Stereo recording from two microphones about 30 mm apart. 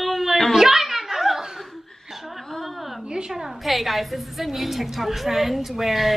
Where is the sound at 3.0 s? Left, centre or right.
Right.